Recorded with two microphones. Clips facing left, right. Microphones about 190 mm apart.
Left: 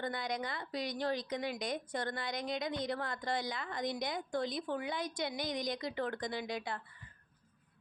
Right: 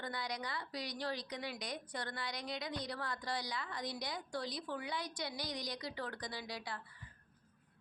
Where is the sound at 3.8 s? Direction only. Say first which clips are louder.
Left 9 dB; 20° left (ahead or behind).